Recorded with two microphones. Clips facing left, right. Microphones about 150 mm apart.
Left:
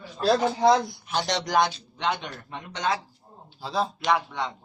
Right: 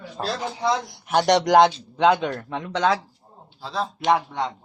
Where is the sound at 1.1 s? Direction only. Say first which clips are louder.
Right 8 dB; 75° right (ahead or behind); by 3.0 s 90° right.